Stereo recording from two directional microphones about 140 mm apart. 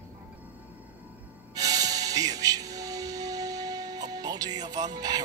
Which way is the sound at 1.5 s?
25° right (ahead or behind).